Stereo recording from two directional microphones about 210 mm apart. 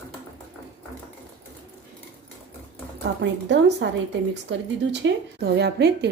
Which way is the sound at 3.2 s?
55° right (ahead or behind).